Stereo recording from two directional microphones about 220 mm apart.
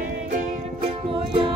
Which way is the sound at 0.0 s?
35° right (ahead or behind).